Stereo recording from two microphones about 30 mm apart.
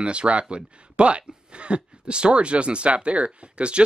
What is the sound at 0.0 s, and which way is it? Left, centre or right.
Speech, right.